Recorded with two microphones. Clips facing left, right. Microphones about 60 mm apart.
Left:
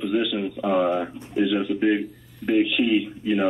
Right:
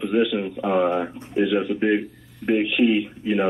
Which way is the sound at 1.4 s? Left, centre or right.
Centre.